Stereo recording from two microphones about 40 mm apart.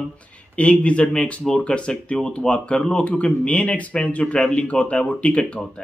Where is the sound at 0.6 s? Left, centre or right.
Left.